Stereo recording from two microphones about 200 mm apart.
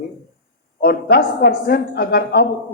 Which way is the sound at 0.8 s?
50° left (ahead or behind).